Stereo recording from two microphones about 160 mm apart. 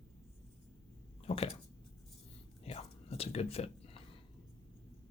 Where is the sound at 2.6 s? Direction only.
40° left (ahead or behind).